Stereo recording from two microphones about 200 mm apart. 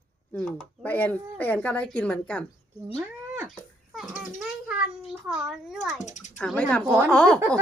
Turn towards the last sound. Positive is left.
turn(degrees=5)  # may be behind; listen again after turning